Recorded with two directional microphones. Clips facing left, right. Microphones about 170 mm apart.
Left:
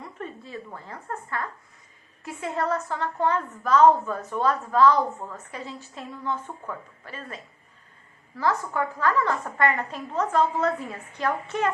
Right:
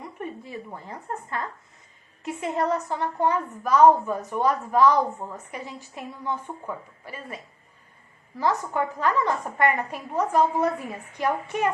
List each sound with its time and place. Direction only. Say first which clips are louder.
0.0 s a woman's voice: right 2 dB; 15° right (ahead or behind)